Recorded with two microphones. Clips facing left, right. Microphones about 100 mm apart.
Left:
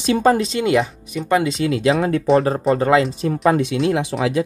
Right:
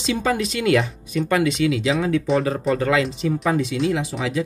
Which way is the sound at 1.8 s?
50° left (ahead or behind).